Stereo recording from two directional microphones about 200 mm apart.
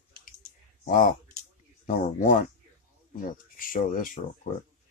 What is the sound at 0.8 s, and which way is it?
Speech, 40° left (ahead or behind).